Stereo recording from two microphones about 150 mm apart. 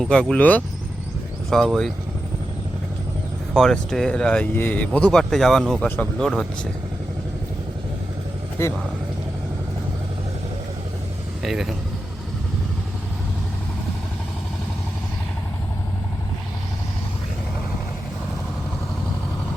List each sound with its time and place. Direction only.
0.0 s speech: 5° left (ahead or behind)
3.5 s speech: 5° left (ahead or behind)
8.6 s speech: 20° left (ahead or behind)
11.4 s speech: 5° right (ahead or behind)